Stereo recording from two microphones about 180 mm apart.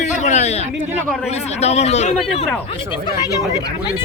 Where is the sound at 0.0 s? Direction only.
40° left (ahead or behind).